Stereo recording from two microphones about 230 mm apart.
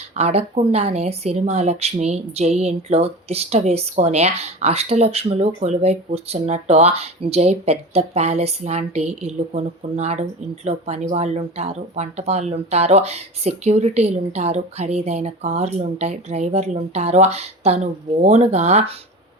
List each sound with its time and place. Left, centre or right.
0.2 s speech: right